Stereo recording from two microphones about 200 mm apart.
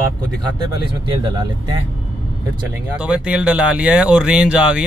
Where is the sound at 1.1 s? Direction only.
20° right (ahead or behind).